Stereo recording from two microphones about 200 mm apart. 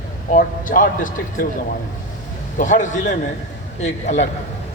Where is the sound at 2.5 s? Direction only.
40° left (ahead or behind).